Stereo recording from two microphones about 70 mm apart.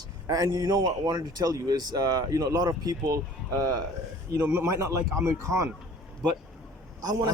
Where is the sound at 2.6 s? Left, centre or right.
Right.